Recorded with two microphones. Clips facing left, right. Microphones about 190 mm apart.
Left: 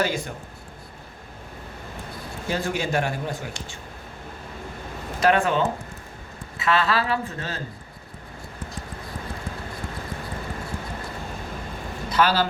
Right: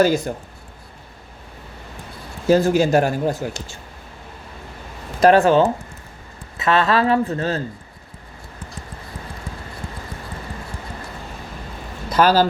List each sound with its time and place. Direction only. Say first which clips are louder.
0.0 s speech: right 9 dB; 40° right (ahead or behind)
2.5 s speech: right 11 dB; 40° right (ahead or behind)
5.2 s speech: right 8 dB; 35° right (ahead or behind)
6.7 s speech: right 6 dB; 40° right (ahead or behind)
12.1 s a man's voice: right 6 dB; 40° right (ahead or behind)